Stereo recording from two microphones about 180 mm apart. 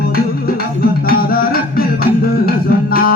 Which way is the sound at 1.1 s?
55° left (ahead or behind).